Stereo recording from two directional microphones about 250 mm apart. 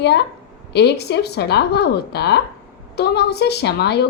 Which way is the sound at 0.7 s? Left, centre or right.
Left.